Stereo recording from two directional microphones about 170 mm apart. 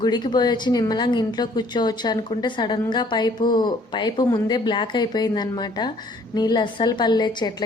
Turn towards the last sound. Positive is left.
turn(degrees=25)  # may be behind; listen again after turning